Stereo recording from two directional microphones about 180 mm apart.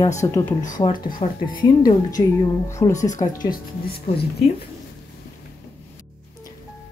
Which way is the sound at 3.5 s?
60° left (ahead or behind).